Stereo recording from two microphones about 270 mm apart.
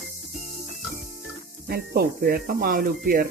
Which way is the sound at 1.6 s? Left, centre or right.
Right.